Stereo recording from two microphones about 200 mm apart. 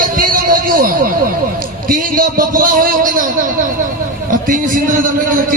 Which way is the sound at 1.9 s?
45° right (ahead or behind).